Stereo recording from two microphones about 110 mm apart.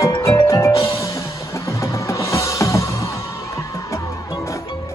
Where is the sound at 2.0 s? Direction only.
30° left (ahead or behind).